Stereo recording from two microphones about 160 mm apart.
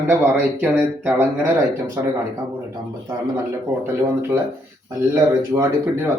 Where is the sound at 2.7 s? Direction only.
25° right (ahead or behind).